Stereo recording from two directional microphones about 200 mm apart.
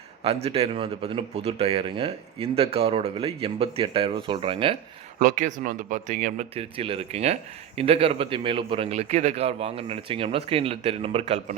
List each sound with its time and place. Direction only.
0.2 s speech: 30° right (ahead or behind)
5.2 s speech: 40° right (ahead or behind)